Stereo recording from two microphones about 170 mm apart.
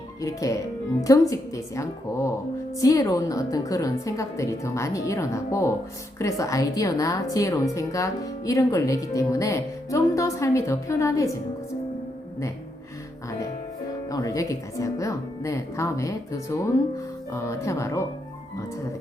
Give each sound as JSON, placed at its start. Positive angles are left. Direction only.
{"t": 0.2, "sound": "a woman's voice", "side_deg": 20}
{"t": 14.1, "sound": "a woman's voice", "side_deg": 20}